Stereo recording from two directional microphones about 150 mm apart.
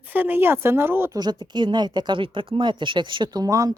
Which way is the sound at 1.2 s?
30° right (ahead or behind).